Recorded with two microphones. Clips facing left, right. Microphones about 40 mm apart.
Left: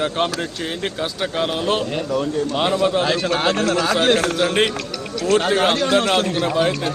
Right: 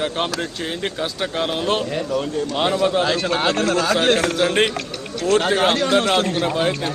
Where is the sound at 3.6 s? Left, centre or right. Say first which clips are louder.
Even; right.